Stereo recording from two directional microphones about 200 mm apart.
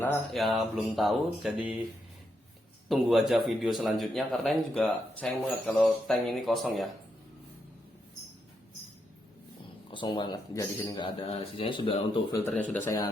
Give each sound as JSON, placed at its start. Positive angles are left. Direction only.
{"t": 0.3, "sound": "speech", "side_deg": 0}
{"t": 2.9, "sound": "speech", "side_deg": 0}
{"t": 9.9, "sound": "speech", "side_deg": 25}
{"t": 12.4, "sound": "speech", "side_deg": 10}